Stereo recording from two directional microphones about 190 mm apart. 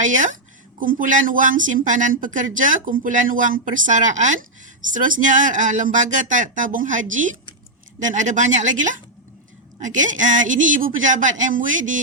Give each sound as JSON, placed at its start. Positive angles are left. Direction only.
{"t": 0.0, "sound": "speech", "side_deg": -40}